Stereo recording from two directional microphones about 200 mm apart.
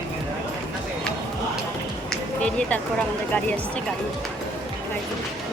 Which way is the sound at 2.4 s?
5° left (ahead or behind).